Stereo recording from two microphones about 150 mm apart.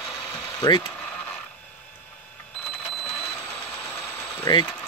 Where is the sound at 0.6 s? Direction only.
30° left (ahead or behind).